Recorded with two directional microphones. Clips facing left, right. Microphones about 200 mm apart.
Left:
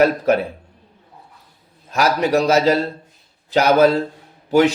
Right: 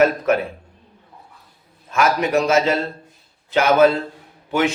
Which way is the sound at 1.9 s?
35° left (ahead or behind).